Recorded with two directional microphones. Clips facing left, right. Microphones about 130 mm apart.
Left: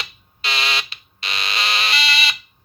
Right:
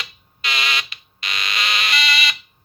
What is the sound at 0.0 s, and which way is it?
Fire alarm, 30° left (ahead or behind).